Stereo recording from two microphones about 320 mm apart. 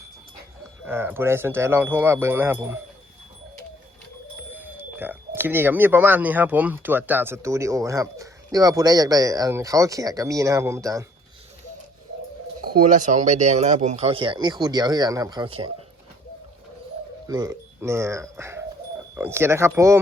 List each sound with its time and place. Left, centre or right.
0.9 s speech: centre
4.5 s speech: centre
12.8 s speech: right
17.2 s speech: centre